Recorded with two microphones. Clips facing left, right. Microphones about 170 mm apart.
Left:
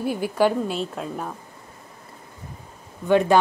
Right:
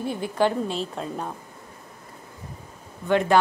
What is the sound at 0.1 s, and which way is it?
A woman's voice, 10° left (ahead or behind).